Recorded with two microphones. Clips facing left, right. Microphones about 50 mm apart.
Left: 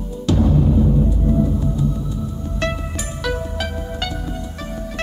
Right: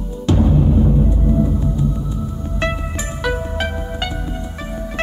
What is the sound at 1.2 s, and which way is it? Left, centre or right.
Music, centre.